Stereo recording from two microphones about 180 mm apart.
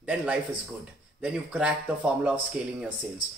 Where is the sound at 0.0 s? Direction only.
5° right (ahead or behind).